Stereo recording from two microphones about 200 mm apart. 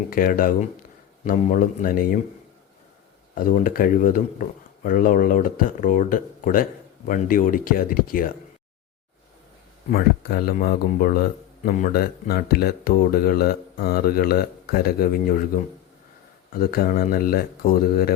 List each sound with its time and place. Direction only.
0.1 s speech: 45° left (ahead or behind)
3.3 s speech: 45° left (ahead or behind)
9.9 s speech: 50° left (ahead or behind)
16.5 s speech: 45° left (ahead or behind)